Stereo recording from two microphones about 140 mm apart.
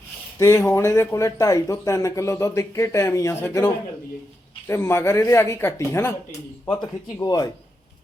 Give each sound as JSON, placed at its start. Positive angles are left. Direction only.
{"t": 0.3, "sound": "speech", "side_deg": 20}
{"t": 4.7, "sound": "speech", "side_deg": 20}